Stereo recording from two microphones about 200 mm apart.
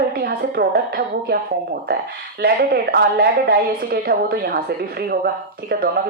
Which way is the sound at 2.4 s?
50° right (ahead or behind).